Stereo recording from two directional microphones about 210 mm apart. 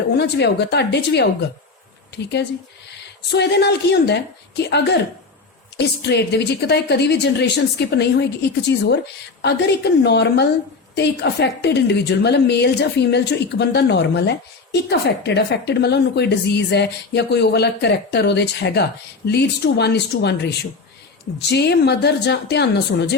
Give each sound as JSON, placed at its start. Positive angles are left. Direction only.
{"t": 0.2, "sound": "a woman's voice", "side_deg": 55}
{"t": 3.3, "sound": "a woman's voice", "side_deg": 55}